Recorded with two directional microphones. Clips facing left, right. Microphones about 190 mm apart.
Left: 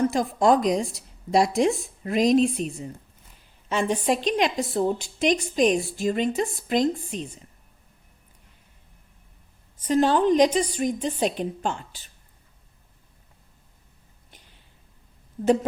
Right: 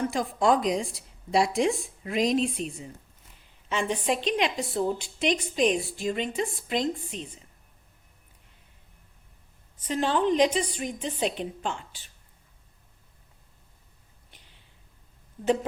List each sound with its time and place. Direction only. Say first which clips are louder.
0.0 s a woman's voice: left 4 dB; 40° left (ahead or behind)
9.8 s a woman's voice: left 5 dB; 40° left (ahead or behind)